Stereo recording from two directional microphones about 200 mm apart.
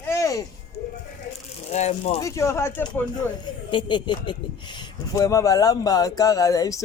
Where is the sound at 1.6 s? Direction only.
35° left (ahead or behind).